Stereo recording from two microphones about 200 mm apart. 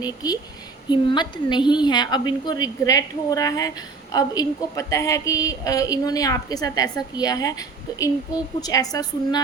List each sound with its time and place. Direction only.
0.0 s a woman's voice: 20° left (ahead or behind)